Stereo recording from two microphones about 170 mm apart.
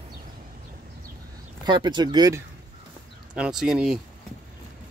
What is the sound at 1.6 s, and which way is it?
Speech, 25° right (ahead or behind).